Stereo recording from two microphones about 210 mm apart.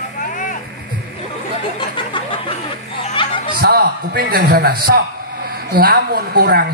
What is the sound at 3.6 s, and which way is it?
A man's voice, 45° right (ahead or behind).